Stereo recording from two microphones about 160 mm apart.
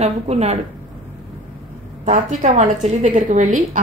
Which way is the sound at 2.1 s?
50° right (ahead or behind).